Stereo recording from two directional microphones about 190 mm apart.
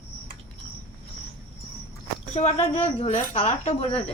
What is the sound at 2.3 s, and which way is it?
A woman's voice, 35° left (ahead or behind).